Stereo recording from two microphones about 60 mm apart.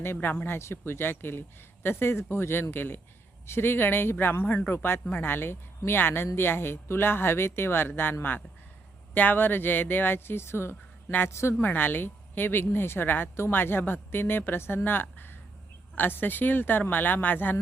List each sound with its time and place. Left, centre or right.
0.0 s speech: left
9.1 s speech: left
11.6 s speech: left
14.8 s a sound: left
16.0 s speech: left